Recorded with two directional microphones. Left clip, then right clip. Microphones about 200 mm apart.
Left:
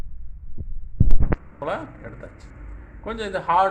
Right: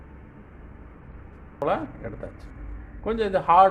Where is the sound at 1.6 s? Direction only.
40° right (ahead or behind).